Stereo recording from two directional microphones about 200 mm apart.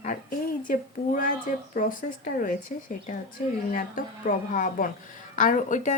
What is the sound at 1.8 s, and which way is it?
Speech, 40° left (ahead or behind).